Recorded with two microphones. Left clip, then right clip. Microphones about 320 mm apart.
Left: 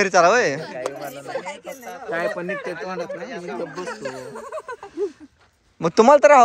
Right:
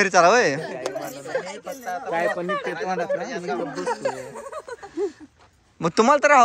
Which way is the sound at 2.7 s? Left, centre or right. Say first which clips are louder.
Right 4 dB; centre.